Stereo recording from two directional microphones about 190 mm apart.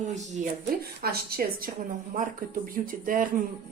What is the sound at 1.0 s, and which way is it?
Speech, 55° right (ahead or behind).